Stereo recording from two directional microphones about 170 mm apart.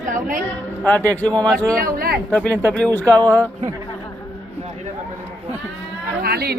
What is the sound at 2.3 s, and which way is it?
Speech, 10° left (ahead or behind).